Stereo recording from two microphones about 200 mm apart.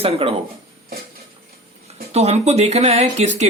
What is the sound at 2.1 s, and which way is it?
Speech, 30° right (ahead or behind).